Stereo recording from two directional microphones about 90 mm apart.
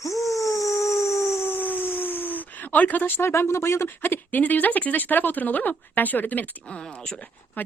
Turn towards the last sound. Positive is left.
turn(degrees=15)  # may be behind; listen again after turning